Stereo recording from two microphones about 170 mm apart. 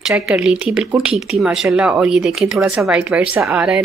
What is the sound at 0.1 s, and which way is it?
Speech, 5° right (ahead or behind).